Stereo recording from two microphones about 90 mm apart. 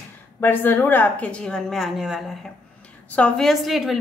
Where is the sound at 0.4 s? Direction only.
25° left (ahead or behind); by 2.2 s 5° right (ahead or behind).